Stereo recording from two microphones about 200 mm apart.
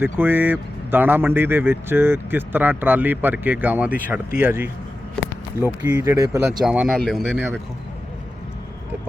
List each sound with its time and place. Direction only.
0.0 s speech: 10° right (ahead or behind)
6.6 s speech: 5° right (ahead or behind)